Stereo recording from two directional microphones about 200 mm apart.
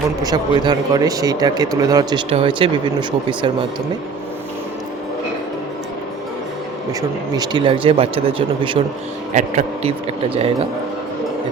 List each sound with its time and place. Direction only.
0.2 s speech: 20° right (ahead or behind)
7.3 s speech: 20° right (ahead or behind)